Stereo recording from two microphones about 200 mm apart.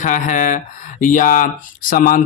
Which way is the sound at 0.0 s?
40° left (ahead or behind).